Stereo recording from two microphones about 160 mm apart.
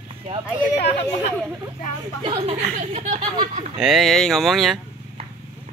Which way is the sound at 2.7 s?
45° right (ahead or behind).